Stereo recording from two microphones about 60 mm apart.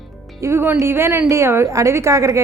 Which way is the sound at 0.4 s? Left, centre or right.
Right.